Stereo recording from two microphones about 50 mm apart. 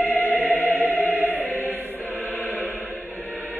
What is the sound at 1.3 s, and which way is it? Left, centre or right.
Choir, left.